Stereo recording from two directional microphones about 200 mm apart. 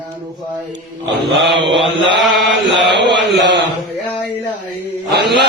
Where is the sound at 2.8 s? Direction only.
60° right (ahead or behind).